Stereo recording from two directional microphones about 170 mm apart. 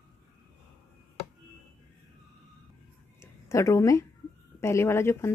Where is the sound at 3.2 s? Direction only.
15° left (ahead or behind).